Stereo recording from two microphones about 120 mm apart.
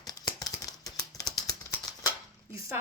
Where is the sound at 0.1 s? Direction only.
30° left (ahead or behind).